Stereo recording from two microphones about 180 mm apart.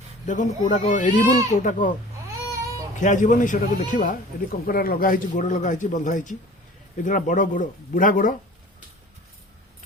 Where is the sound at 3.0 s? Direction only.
45° left (ahead or behind).